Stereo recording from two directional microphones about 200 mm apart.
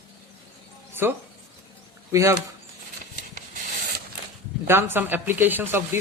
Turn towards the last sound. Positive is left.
turn(degrees=-10)  # may be behind; listen again after turning